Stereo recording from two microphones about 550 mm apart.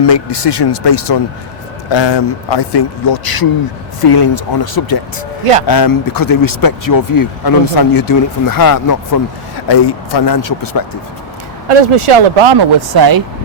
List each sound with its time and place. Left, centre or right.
0.0 s a man's voice: left
11.7 s speech: right